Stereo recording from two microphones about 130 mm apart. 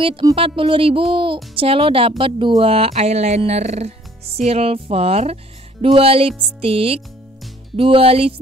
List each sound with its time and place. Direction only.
0.0 s speech: 45° right (ahead or behind)